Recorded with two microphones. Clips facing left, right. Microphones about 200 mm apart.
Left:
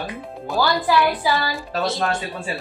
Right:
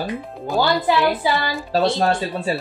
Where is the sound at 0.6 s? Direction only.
25° right (ahead or behind).